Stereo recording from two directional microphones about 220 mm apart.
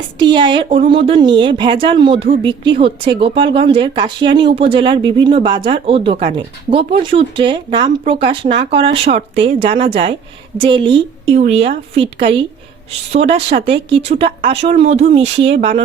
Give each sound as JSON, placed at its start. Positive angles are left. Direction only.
{"t": 0.2, "sound": "a woman's voice", "side_deg": -20}